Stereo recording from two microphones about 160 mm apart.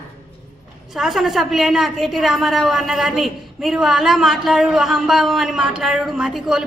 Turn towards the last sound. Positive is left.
turn(degrees=0)  # may be behind; listen again after turning